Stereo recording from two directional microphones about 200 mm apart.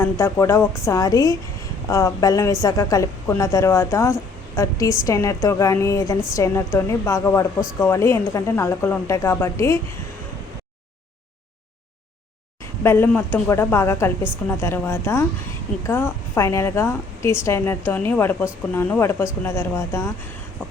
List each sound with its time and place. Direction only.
0.0 s a woman's voice: 15° left (ahead or behind)
12.8 s a woman's voice: 10° left (ahead or behind)